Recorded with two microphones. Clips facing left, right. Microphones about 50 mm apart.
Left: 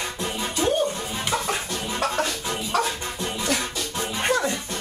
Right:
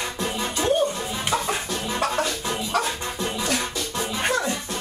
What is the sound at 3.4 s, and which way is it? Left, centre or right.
Music, centre.